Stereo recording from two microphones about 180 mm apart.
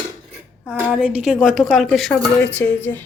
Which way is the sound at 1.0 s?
5° right (ahead or behind).